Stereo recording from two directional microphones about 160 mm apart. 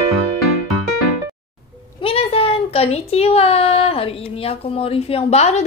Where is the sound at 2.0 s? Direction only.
35° left (ahead or behind).